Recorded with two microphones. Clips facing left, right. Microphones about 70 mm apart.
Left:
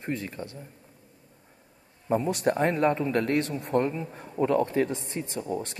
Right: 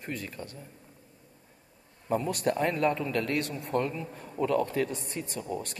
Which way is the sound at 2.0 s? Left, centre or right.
Left.